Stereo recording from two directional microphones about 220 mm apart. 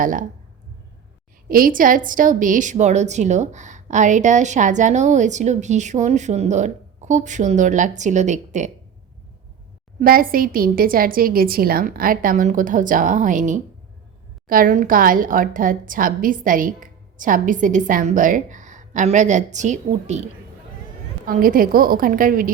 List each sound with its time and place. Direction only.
0.0 s a woman's voice: 35° right (ahead or behind)
1.5 s a woman's voice: 40° right (ahead or behind)
10.0 s a woman's voice: 40° right (ahead or behind)
21.2 s a woman's voice: 40° right (ahead or behind)